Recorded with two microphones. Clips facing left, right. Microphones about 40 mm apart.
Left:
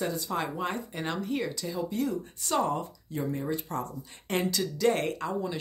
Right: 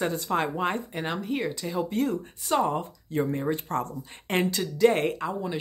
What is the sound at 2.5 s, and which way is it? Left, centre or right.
Speech, right.